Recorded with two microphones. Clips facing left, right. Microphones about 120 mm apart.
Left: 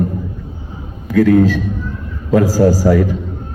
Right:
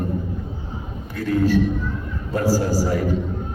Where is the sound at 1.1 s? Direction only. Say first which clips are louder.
Left 8 dB; 80° left.